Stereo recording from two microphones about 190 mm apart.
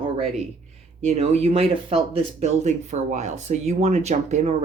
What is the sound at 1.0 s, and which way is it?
Speech, 35° right (ahead or behind).